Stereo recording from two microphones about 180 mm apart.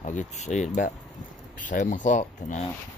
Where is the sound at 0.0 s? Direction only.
40° left (ahead or behind).